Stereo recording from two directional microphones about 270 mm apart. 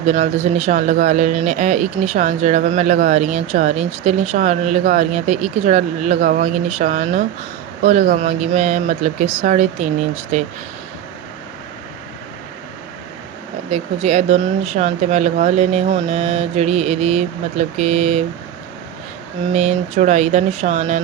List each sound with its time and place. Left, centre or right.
0.0 s speech: right
13.7 s speech: right
19.5 s speech: right